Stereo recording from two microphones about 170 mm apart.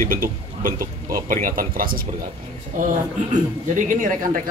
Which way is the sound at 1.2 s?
50° right (ahead or behind).